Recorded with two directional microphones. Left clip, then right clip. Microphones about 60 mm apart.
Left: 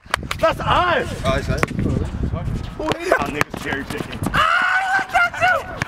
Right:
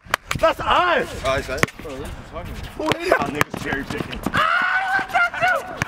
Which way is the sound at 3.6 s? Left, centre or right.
Left.